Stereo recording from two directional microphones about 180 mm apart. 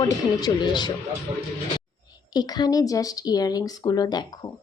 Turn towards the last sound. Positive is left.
turn(degrees=20)  # may be behind; listen again after turning